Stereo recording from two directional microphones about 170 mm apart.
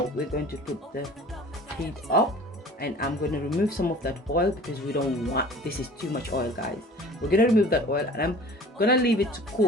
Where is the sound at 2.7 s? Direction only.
65° left (ahead or behind).